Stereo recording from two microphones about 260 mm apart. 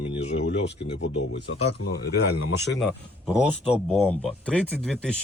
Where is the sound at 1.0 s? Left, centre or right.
Left.